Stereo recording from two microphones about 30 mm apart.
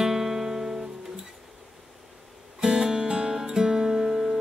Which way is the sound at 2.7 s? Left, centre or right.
Right.